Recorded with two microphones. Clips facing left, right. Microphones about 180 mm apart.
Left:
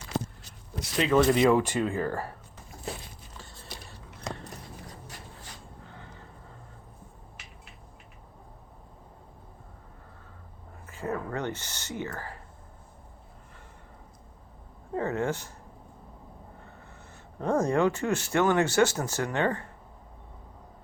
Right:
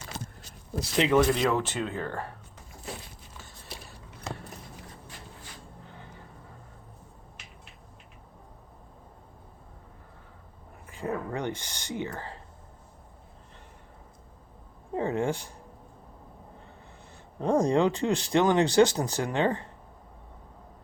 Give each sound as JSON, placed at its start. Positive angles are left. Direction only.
{"t": 0.8, "sound": "speech", "side_deg": -20}
{"t": 1.3, "sound": "speech", "side_deg": 10}
{"t": 10.8, "sound": "speech", "side_deg": -15}
{"t": 14.9, "sound": "speech", "side_deg": -15}
{"t": 17.4, "sound": "speech", "side_deg": -15}